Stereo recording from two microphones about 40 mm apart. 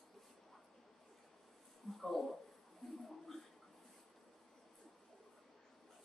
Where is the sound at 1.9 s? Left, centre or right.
Centre.